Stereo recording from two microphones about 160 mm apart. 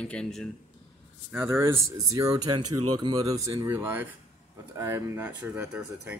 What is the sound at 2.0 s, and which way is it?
Speech, 25° right (ahead or behind).